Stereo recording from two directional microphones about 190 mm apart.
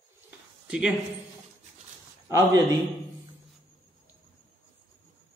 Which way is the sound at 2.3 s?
15° right (ahead or behind).